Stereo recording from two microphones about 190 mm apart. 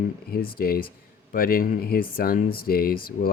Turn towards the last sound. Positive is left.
turn(degrees=50)  # may be behind; listen again after turning